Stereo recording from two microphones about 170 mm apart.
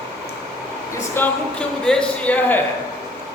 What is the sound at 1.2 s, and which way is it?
Speech, 5° left (ahead or behind).